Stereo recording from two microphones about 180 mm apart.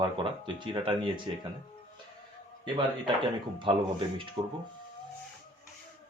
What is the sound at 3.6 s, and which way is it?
Speech, 30° right (ahead or behind).